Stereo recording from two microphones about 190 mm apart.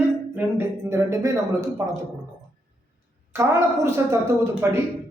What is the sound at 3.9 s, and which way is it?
Speech, 15° right (ahead or behind).